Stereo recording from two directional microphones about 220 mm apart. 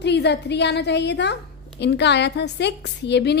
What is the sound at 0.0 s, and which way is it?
A woman's voice, 50° left (ahead or behind).